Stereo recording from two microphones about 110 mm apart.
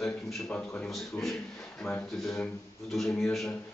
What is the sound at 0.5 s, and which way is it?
Speech, 15° left (ahead or behind).